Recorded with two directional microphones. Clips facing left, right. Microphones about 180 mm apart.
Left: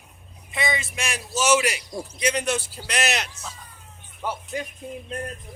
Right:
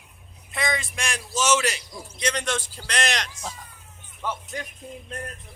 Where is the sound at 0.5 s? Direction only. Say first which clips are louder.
Left 1 dB; centre (ahead or behind).